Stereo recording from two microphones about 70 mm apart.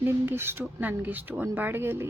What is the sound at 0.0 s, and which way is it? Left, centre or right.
Speech, right.